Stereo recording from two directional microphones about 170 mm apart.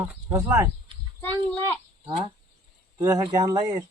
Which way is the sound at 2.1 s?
30° right (ahead or behind).